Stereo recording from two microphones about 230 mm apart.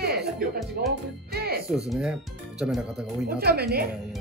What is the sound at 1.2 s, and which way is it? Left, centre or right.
Music, right.